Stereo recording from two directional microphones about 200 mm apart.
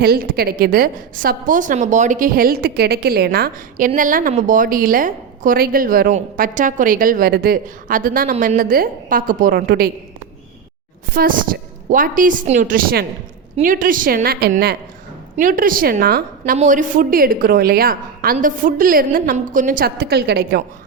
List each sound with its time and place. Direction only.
0.0 s a woman's voice: 50° right (ahead or behind)
11.1 s a woman's voice: 45° right (ahead or behind)
16.4 s a woman's voice: 35° right (ahead or behind); by 20.6 s 55° right (ahead or behind)